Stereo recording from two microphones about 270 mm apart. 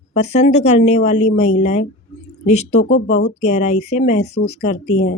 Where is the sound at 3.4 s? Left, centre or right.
Left.